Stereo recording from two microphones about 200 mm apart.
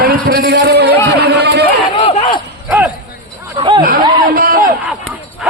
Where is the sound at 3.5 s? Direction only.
25° right (ahead or behind).